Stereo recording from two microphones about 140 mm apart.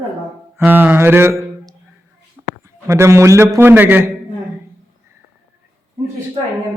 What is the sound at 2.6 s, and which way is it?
A man's voice, 20° right (ahead or behind).